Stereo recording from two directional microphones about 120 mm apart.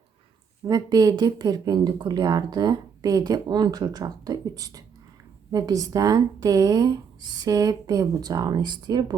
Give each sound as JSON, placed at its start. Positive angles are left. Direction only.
{"t": 0.7, "sound": "speech", "side_deg": -30}